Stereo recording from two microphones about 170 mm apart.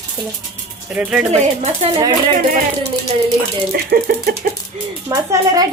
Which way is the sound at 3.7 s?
65° right (ahead or behind).